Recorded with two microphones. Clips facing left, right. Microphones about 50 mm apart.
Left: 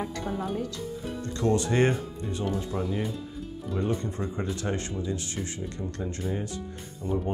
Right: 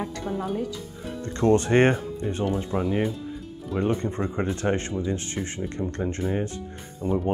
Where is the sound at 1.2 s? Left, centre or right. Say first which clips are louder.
Right 5 dB; right.